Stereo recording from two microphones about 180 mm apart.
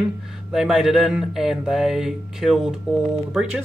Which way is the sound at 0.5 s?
Centre (ahead or behind).